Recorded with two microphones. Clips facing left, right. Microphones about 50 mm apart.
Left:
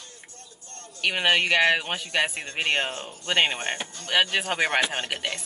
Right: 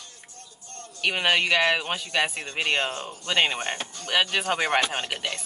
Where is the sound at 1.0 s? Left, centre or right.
Left.